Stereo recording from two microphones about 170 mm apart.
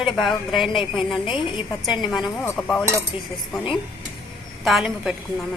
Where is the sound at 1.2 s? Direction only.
30° left (ahead or behind).